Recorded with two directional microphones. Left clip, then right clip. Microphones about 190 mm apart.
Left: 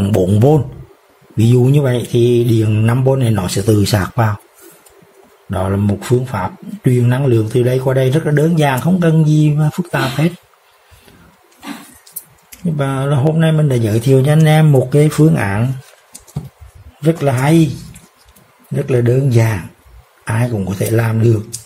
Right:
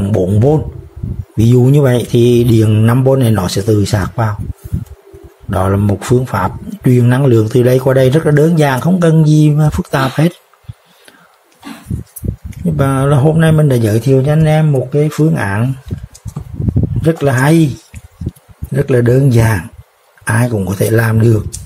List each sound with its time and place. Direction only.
0.0 s speech: centre (ahead or behind)
1.3 s speech: 15° right (ahead or behind)
3.6 s speech: 5° right (ahead or behind)
5.5 s speech: 20° right (ahead or behind)
12.6 s speech: 20° right (ahead or behind)
17.0 s speech: 15° right (ahead or behind)
18.7 s speech: 20° right (ahead or behind)